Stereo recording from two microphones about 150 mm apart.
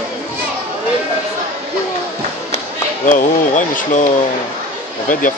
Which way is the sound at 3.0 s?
60° left (ahead or behind).